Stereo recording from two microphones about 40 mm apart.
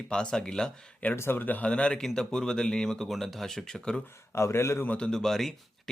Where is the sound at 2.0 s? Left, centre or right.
Centre.